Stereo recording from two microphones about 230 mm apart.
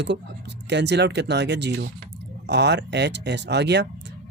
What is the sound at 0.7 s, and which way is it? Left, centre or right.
Speech, right.